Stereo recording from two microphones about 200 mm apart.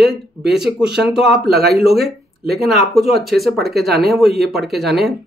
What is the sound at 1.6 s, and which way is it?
Speech, 50° right (ahead or behind).